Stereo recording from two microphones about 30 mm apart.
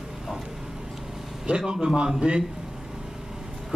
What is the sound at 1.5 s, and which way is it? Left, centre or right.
Speech, right.